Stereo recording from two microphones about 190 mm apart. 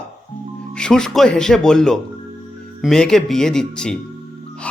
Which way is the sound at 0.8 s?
5° left (ahead or behind).